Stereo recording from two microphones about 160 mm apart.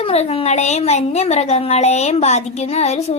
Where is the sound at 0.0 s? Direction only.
40° left (ahead or behind).